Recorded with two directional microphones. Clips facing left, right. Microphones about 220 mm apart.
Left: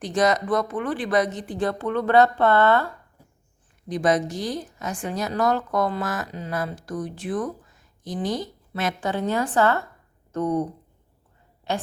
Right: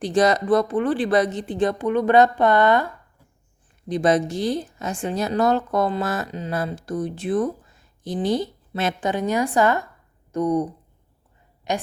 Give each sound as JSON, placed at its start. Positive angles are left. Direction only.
{"t": 0.0, "sound": "a woman's voice", "side_deg": -30}
{"t": 3.8, "sound": "a woman's voice", "side_deg": -25}